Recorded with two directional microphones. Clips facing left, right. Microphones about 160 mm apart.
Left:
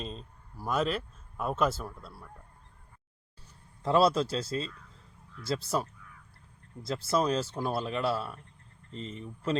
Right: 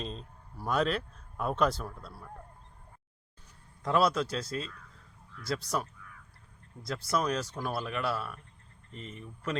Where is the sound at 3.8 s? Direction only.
30° left (ahead or behind).